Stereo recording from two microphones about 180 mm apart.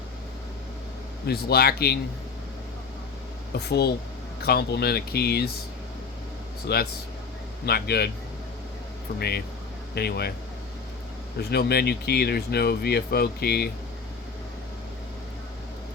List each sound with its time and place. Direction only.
1.3 s speech: 60° left (ahead or behind)
3.5 s speech: 65° left (ahead or behind)
6.7 s speech: 60° left (ahead or behind)
9.1 s speech: 60° left (ahead or behind)
11.3 s speech: 60° left (ahead or behind)